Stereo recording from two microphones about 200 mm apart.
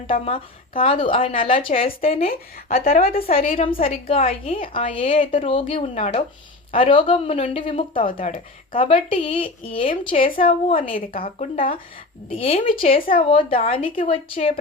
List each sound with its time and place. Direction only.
0.1 s a woman's voice: 25° left (ahead or behind)
2.3 s speech: 45° left (ahead or behind)
3.6 s a woman's voice: 30° left (ahead or behind)
8.1 s speech: 45° left (ahead or behind)
8.8 s a woman's voice: 25° left (ahead or behind)